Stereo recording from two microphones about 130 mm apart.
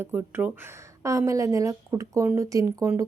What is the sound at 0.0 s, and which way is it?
A woman's voice, 15° right (ahead or behind).